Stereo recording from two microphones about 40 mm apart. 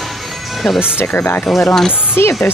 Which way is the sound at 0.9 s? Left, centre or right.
Left.